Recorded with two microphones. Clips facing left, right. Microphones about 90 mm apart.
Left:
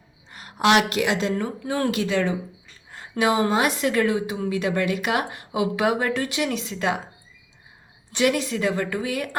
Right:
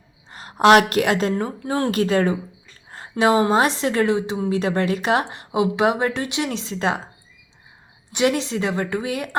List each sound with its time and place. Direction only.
0.3 s a woman's voice: 30° right (ahead or behind); by 1.3 s 50° right (ahead or behind)
1.4 s a woman's voice: 35° right (ahead or behind)
2.0 s speech: 45° right (ahead or behind)
2.9 s a sound: 35° right (ahead or behind)
3.5 s a woman's voice: 30° right (ahead or behind)
8.1 s a woman's voice: 20° right (ahead or behind)